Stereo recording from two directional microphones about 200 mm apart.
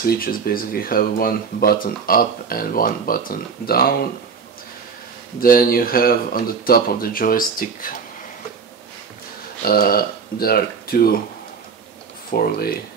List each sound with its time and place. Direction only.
0.0 s speech: 45° left (ahead or behind)
5.4 s speech: 45° left (ahead or behind)
9.7 s speech: 50° left (ahead or behind)
12.3 s speech: 50° left (ahead or behind)